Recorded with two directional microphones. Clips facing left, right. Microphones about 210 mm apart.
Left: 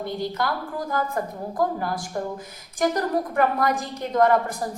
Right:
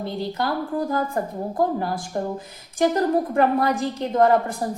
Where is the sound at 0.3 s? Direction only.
30° right (ahead or behind).